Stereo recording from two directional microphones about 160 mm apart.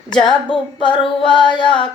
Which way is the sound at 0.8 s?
30° left (ahead or behind).